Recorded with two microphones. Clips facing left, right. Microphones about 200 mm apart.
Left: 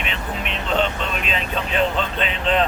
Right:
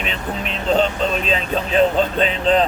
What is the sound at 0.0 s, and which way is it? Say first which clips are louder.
Speech: right 3 dB; 35° right (ahead or behind).